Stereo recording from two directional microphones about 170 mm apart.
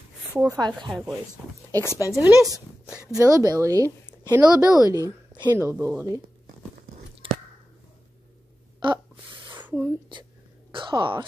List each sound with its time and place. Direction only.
0.3 s speech: 20° right (ahead or behind)
0.7 s speech: centre (ahead or behind)
1.8 s speech: 15° left (ahead or behind)
2.1 s speech: 20° right (ahead or behind)
7.2 s chewing: 30° right (ahead or behind)
8.7 s gasp: 25° right (ahead or behind)
9.6 s a sound: 10° right (ahead or behind)
10.7 s a sound: 30° right (ahead or behind)